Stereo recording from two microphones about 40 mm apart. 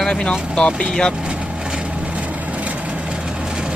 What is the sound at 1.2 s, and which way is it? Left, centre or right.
Vehicle, right.